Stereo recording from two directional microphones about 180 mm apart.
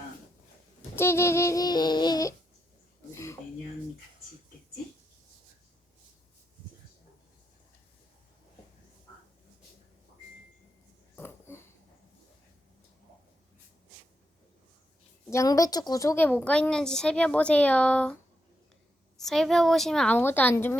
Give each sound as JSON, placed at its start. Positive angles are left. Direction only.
{"t": 0.9, "sound": "speech", "side_deg": 15}
{"t": 11.2, "sound": "a sound", "side_deg": 15}
{"t": 15.3, "sound": "a woman's voice", "side_deg": 15}